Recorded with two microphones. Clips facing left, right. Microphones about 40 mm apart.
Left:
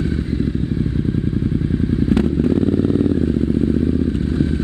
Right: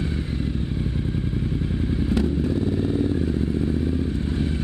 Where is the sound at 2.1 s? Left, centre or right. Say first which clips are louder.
Left 6 dB; left.